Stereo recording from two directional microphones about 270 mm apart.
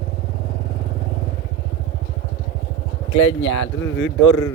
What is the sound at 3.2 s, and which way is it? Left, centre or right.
Speech, left.